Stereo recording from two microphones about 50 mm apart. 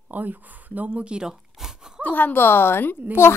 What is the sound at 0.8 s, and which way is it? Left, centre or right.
Speech, right.